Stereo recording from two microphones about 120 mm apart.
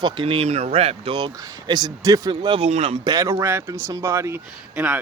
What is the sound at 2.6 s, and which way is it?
Speech, 60° right (ahead or behind).